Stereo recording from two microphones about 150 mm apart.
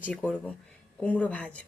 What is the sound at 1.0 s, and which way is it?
Speech, 10° left (ahead or behind).